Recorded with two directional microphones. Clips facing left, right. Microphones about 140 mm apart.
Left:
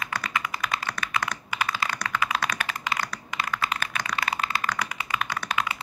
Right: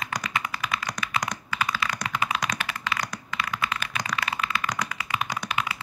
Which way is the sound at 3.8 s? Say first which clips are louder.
Even; 35° left (ahead or behind).